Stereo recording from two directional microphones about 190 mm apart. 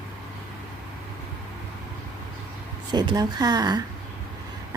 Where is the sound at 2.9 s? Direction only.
20° right (ahead or behind).